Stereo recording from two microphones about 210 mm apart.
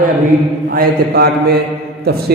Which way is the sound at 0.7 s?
45° right (ahead or behind).